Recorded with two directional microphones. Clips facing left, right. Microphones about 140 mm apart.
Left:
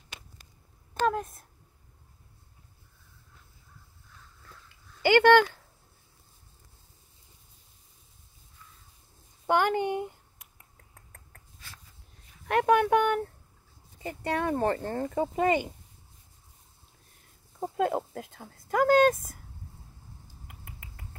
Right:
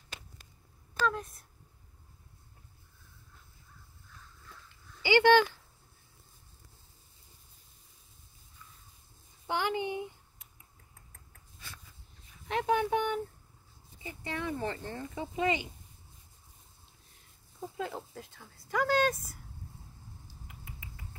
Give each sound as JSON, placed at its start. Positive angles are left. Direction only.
{"t": 1.0, "sound": "a sound", "side_deg": 50}
{"t": 5.0, "sound": "speech", "side_deg": 55}
{"t": 9.5, "sound": "finger snapping", "side_deg": 55}
{"t": 12.4, "sound": "a sound", "side_deg": 60}
{"t": 14.0, "sound": "speech", "side_deg": 60}
{"t": 17.6, "sound": "speech", "side_deg": 60}
{"t": 20.4, "sound": "finger snapping", "side_deg": 55}